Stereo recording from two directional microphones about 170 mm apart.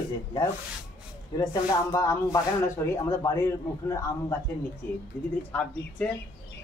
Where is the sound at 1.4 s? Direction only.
20° left (ahead or behind).